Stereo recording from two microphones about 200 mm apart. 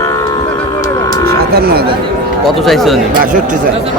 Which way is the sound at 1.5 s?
50° right (ahead or behind).